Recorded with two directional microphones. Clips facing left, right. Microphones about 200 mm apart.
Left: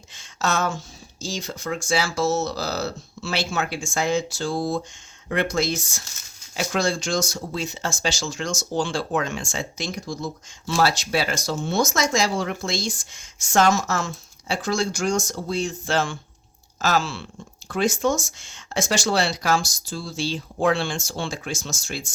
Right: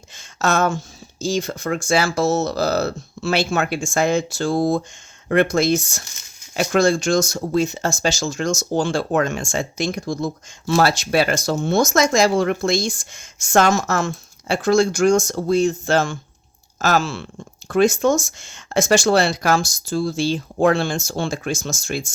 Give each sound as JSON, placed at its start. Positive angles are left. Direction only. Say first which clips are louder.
{"t": 0.2, "sound": "speech", "louder": "right 5 dB", "side_deg": -50}